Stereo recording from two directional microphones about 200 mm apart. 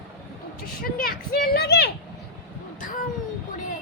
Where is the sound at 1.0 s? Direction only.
45° left (ahead or behind).